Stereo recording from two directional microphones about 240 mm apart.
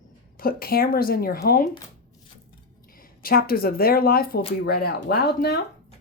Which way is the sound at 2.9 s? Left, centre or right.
Left.